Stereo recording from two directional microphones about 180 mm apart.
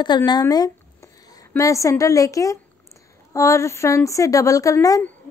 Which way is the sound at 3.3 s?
15° left (ahead or behind).